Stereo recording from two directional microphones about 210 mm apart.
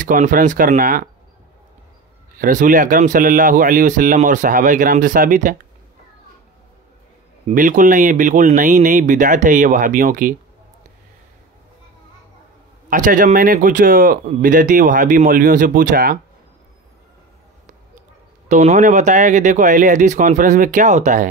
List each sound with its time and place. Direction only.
0.0 s speech: 40° right (ahead or behind)
2.3 s speech: 40° right (ahead or behind)
7.4 s speech: 40° right (ahead or behind)
12.9 s speech: 40° right (ahead or behind)
18.5 s speech: 35° right (ahead or behind)